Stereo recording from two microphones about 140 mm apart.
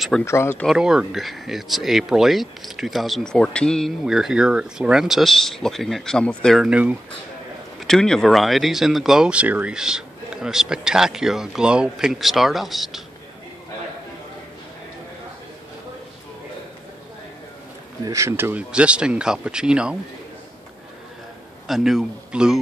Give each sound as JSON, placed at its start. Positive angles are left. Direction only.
{"t": 0.2, "sound": "speech", "side_deg": 15}
{"t": 0.7, "sound": "speech", "side_deg": -5}
{"t": 6.6, "sound": "speech", "side_deg": -10}
{"t": 7.8, "sound": "speech", "side_deg": 5}
{"t": 18.0, "sound": "speech", "side_deg": -20}
{"t": 21.6, "sound": "speech", "side_deg": 0}